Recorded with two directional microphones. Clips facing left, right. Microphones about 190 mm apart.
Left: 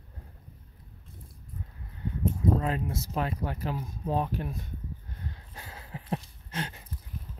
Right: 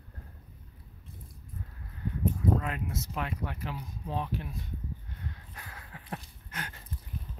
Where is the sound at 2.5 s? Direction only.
30° left (ahead or behind).